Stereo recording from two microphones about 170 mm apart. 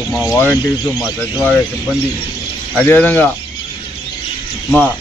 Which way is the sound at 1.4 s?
15° left (ahead or behind).